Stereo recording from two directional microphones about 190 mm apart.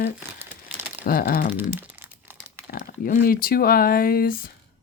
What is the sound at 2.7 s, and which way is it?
Speech, 45° left (ahead or behind).